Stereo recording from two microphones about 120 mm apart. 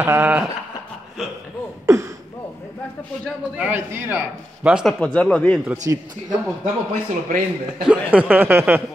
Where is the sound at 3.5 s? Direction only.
15° right (ahead or behind).